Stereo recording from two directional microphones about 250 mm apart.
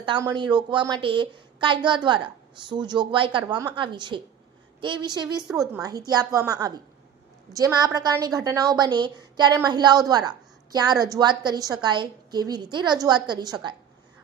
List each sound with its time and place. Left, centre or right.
0.0 s a woman's voice: centre